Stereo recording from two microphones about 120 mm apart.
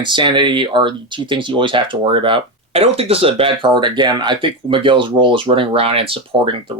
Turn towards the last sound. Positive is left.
turn(degrees=-45)  # may be behind; listen again after turning